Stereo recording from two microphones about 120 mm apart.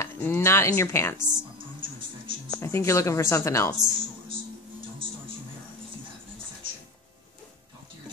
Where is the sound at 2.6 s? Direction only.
25° left (ahead or behind).